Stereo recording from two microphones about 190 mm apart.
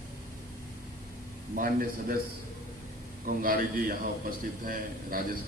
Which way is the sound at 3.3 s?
50° right (ahead or behind).